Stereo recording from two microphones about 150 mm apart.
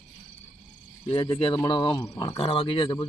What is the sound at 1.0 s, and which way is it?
Speech, 35° left (ahead or behind).